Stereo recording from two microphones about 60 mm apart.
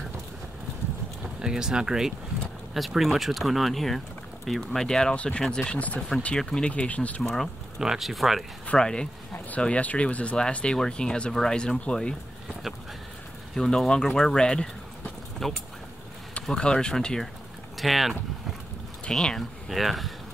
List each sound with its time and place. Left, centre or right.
1.4 s speech: centre; by 5.9 s left
5.9 s speech: centre
7.8 s speech: centre
8.6 s speech: centre
13.6 s speech: centre
19.1 s speech: centre